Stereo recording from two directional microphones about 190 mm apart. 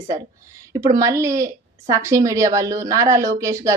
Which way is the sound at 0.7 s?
20° right (ahead or behind).